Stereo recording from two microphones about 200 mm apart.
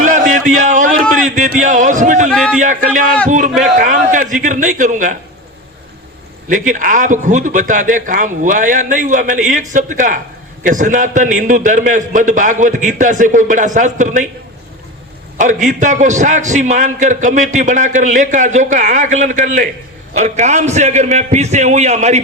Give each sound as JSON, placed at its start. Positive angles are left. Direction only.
{"t": 0.0, "sound": "a sound", "side_deg": -40}
{"t": 2.6, "sound": "a man's voice", "side_deg": -40}
{"t": 6.5, "sound": "a man's voice", "side_deg": -40}
{"t": 15.6, "sound": "a man's voice", "side_deg": -40}